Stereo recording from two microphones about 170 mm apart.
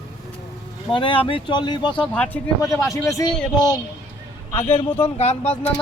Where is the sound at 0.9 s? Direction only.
30° left (ahead or behind).